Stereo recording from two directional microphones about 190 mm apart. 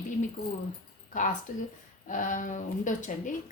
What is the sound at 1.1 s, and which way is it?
Speech, 45° left (ahead or behind).